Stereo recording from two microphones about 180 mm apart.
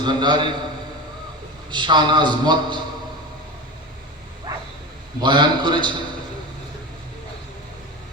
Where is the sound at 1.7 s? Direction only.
25° right (ahead or behind).